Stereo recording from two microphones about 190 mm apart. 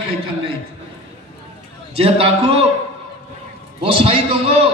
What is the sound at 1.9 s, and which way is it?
Speech, 30° right (ahead or behind).